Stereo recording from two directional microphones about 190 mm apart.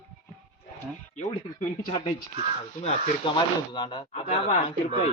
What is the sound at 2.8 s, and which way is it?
Speech, 35° left (ahead or behind).